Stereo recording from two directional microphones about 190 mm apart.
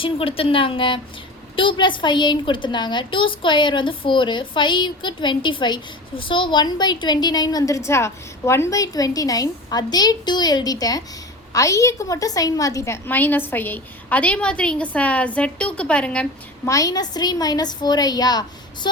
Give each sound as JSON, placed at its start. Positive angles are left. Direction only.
{"t": 0.0, "sound": "a woman's voice", "side_deg": 30}
{"t": 16.6, "sound": "a woman's voice", "side_deg": 20}